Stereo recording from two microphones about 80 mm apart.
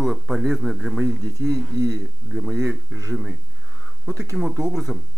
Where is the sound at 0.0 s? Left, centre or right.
Centre.